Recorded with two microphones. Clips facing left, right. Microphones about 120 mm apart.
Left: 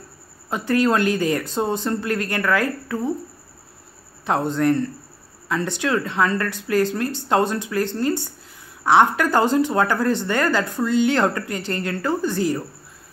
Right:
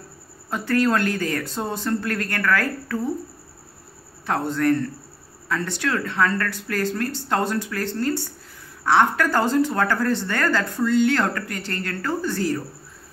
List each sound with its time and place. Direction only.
0.5 s speech: 20° left (ahead or behind)
4.3 s speech: 20° left (ahead or behind)